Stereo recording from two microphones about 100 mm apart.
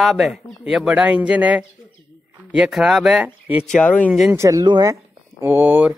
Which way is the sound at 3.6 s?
15° left (ahead or behind).